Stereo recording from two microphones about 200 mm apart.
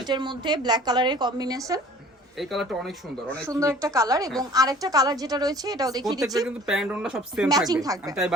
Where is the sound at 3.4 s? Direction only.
15° right (ahead or behind).